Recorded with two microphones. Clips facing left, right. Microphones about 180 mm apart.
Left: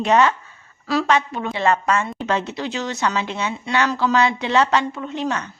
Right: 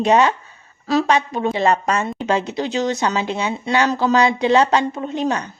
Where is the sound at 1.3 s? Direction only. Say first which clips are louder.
Right 5 dB; 40° right (ahead or behind).